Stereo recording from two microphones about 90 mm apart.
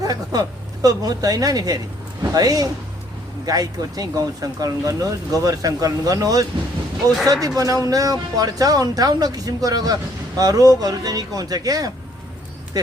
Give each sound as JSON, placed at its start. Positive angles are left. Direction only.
{"t": 0.0, "sound": "speech", "side_deg": -45}
{"t": 7.4, "sound": "speech", "side_deg": -40}